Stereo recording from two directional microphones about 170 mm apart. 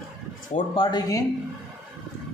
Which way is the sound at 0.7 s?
25° left (ahead or behind).